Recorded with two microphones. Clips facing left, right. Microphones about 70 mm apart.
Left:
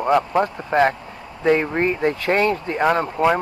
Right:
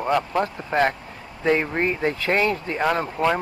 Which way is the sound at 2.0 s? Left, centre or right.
Left.